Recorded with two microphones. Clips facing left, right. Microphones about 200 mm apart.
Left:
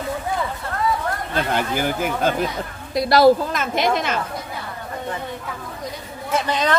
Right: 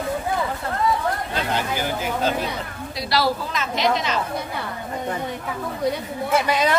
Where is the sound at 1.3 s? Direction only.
50° left (ahead or behind).